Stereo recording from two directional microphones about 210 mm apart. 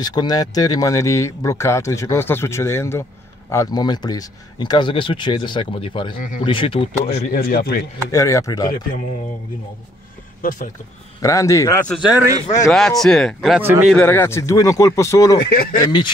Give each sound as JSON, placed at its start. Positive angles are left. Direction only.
{"t": 0.0, "sound": "speech", "side_deg": 20}
{"t": 7.3, "sound": "speech", "side_deg": 45}
{"t": 8.1, "sound": "speech", "side_deg": 15}
{"t": 11.1, "sound": "speech", "side_deg": 15}
{"t": 12.7, "sound": "speech", "side_deg": 0}
{"t": 13.6, "sound": "speech", "side_deg": -10}
{"t": 13.9, "sound": "speech", "side_deg": 10}
{"t": 15.5, "sound": "speech", "side_deg": 45}
{"t": 15.8, "sound": "speech", "side_deg": 20}